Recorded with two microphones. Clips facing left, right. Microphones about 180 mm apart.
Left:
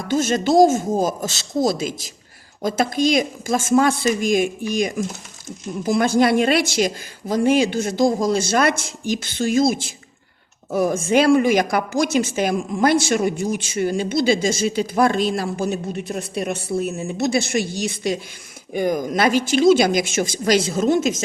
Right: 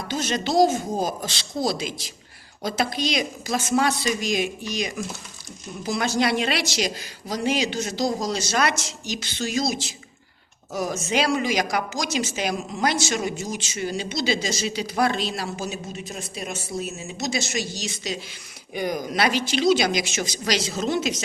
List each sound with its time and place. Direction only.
0.1 s a woman's voice: 50° left (ahead or behind)